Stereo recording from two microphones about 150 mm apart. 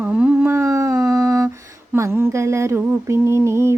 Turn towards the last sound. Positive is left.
turn(degrees=-20)  # may be behind; listen again after turning